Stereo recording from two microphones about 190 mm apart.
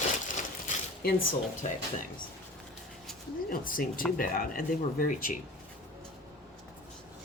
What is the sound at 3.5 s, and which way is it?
Speech, 50° left (ahead or behind).